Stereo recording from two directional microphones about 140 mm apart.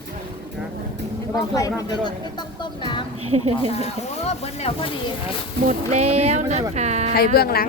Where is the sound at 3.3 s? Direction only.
50° right (ahead or behind).